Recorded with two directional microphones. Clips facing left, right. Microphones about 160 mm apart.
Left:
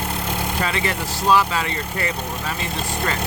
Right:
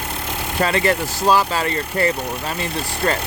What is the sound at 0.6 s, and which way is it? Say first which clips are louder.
Speech: right 5 dB; 45° right (ahead or behind).